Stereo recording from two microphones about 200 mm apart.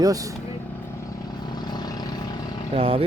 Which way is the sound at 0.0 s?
15° right (ahead or behind).